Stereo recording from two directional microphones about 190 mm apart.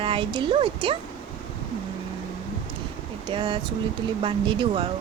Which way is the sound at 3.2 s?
25° right (ahead or behind).